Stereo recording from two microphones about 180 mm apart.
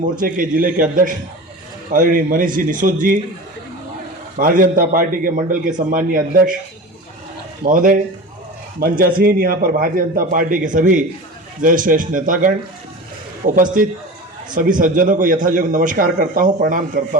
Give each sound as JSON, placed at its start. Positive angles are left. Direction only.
{"t": 0.0, "sound": "a man's voice", "side_deg": -50}
{"t": 4.4, "sound": "a man's voice", "side_deg": -50}
{"t": 7.6, "sound": "a man's voice", "side_deg": -50}